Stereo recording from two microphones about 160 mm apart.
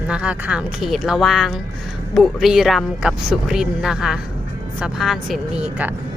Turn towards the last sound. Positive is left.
turn(degrees=-10)  # may be behind; listen again after turning